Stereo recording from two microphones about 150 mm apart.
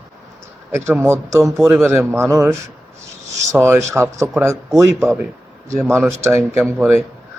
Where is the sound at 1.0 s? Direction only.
20° right (ahead or behind).